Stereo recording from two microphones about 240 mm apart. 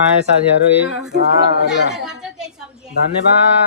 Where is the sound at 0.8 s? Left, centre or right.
Centre.